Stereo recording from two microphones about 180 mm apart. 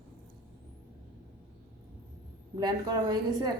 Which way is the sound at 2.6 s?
20° right (ahead or behind).